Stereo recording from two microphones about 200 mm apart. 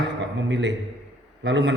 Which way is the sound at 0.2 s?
60° right (ahead or behind).